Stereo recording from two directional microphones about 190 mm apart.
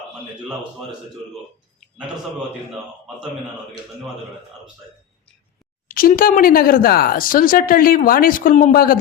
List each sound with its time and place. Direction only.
5.9 s speech: 50° left (ahead or behind)